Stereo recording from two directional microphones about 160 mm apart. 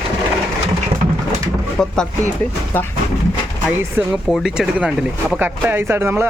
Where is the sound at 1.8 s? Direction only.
5° left (ahead or behind).